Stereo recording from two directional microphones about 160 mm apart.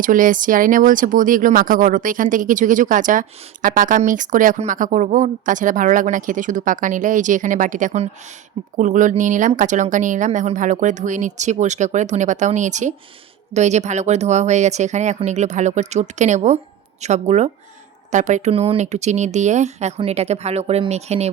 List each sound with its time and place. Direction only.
0.0 s a woman's voice: 55° right (ahead or behind)